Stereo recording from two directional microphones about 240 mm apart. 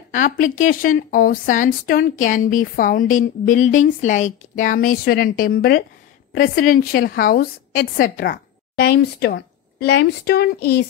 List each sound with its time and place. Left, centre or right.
0.1 s a woman's voice: left